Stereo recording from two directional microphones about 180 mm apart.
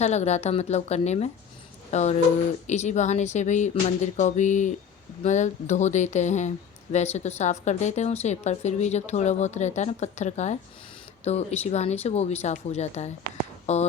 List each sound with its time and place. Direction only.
0.0 s a woman's voice: 40° left (ahead or behind)